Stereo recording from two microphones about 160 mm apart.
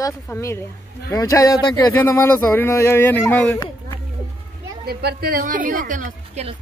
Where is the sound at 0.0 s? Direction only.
20° left (ahead or behind).